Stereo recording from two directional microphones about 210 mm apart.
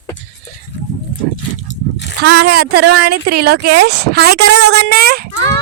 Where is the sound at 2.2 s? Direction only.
50° right (ahead or behind).